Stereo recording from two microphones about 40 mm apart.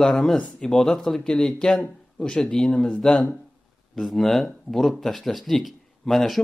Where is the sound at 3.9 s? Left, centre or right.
Centre.